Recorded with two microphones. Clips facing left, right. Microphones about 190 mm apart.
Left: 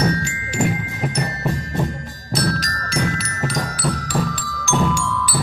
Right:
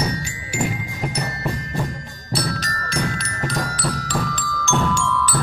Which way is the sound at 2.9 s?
5° left (ahead or behind).